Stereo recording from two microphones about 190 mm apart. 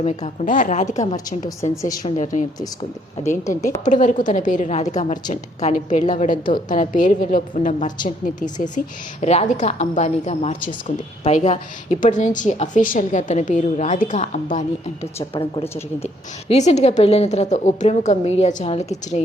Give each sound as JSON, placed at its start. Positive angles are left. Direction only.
{"t": 0.0, "sound": "a woman's voice", "side_deg": 35}
{"t": 2.0, "sound": "a woman's voice", "side_deg": 40}
{"t": 3.8, "sound": "a woman's voice", "side_deg": 40}
{"t": 15.3, "sound": "a woman's voice", "side_deg": 30}